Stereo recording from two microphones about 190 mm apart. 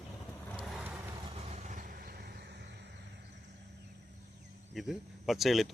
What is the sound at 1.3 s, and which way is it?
Vehicle, 35° right (ahead or behind).